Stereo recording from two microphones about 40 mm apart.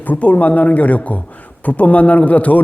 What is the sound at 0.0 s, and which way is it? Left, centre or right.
A man's voice, left.